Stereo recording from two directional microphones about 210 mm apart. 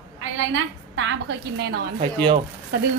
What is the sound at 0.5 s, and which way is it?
A woman's voice, 65° right (ahead or behind).